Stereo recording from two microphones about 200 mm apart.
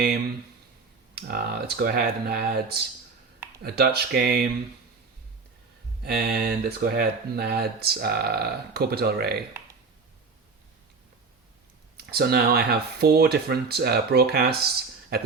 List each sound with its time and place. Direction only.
1.1 s speech: 50° right (ahead or behind)
6.0 s speech: 50° right (ahead or behind)
11.9 s speech: 50° right (ahead or behind)